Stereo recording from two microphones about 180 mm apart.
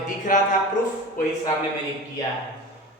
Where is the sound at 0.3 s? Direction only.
50° left (ahead or behind).